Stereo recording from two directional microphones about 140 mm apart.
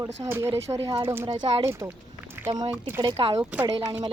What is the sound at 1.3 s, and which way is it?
Speech, 30° right (ahead or behind).